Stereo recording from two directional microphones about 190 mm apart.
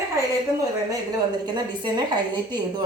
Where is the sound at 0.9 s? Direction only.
20° right (ahead or behind).